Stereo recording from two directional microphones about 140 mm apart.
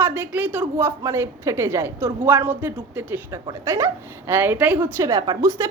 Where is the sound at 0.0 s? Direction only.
15° right (ahead or behind).